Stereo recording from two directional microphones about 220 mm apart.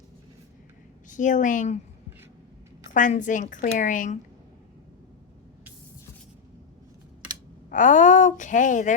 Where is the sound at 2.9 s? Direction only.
35° left (ahead or behind).